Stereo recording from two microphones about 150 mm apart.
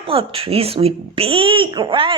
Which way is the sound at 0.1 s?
40° right (ahead or behind).